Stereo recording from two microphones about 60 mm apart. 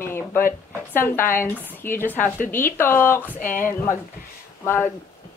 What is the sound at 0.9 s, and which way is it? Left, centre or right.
Speech, left.